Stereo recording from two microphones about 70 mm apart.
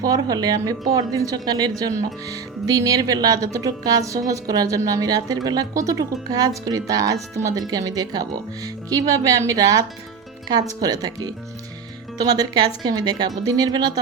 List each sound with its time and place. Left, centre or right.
0.0 s speech: right